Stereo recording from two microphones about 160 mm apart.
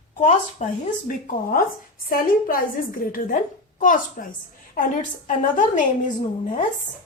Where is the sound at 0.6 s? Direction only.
45° left (ahead or behind).